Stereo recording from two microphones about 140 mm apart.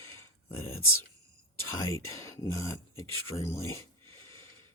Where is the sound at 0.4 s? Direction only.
20° left (ahead or behind).